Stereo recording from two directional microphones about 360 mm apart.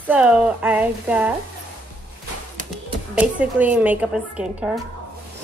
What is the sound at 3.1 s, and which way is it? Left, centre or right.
A woman's voice, centre.